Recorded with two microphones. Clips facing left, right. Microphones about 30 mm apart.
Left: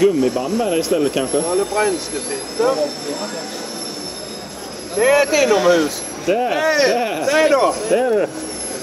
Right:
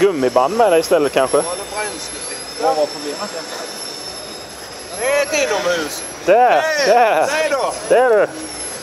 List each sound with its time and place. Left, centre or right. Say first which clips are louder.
0.1 s speech: right 3 dB; right
2.7 s speech: right 2 dB; centre
4.9 s a man's voice: left 3 dB; centre
6.2 s speech: right 7 dB; centre
6.6 s a man's voice: right 1 dB; centre
7.0 s speech: right 8 dB; centre
7.2 s a man's voice: left 4 dB; centre
7.9 s speech: right 8 dB; right